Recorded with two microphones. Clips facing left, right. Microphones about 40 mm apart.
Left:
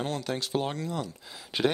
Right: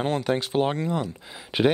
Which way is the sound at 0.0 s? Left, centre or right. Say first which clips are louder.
Right 7 dB; right.